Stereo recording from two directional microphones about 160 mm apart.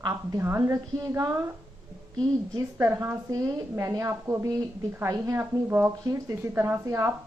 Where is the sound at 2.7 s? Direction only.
15° right (ahead or behind).